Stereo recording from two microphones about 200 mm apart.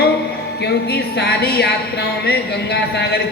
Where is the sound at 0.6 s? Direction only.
55° left (ahead or behind).